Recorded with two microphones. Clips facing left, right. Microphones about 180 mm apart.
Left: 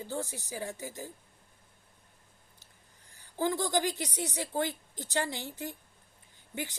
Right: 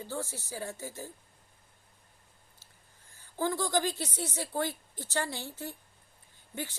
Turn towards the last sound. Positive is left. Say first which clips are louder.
# left 1 dB
turn(degrees=15)  # may be behind; listen again after turning